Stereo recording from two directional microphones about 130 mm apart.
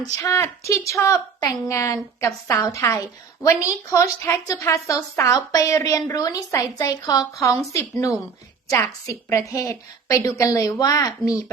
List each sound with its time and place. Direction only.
0.2 s a woman's voice: 20° left (ahead or behind)